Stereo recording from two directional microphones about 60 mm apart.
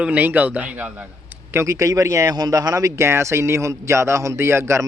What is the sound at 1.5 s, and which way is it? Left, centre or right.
A man's voice, right.